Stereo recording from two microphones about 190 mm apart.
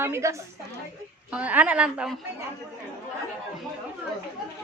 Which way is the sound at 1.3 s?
5° right (ahead or behind).